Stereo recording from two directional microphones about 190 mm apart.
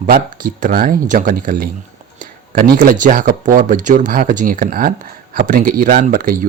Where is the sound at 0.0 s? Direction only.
45° right (ahead or behind).